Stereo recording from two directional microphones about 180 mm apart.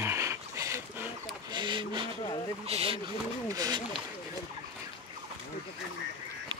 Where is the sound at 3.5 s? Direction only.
20° right (ahead or behind).